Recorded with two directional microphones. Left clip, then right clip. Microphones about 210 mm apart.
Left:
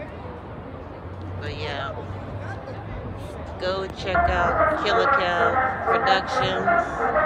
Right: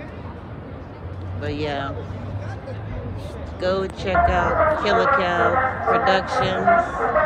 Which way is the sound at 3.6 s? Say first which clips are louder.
Right 4 dB; 5° left (ahead or behind).